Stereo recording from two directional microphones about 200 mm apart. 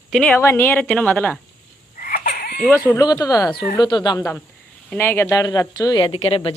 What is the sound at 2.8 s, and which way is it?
Speech, 20° left (ahead or behind).